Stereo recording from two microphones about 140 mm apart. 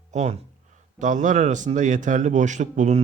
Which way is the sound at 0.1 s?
55° right (ahead or behind).